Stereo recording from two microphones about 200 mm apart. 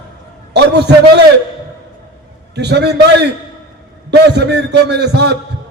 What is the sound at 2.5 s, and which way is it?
A man's voice, 55° right (ahead or behind).